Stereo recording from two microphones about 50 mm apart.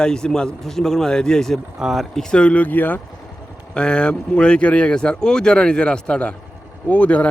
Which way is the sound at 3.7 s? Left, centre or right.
Centre.